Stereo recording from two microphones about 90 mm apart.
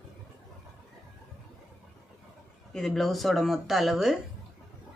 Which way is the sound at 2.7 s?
5° left (ahead or behind).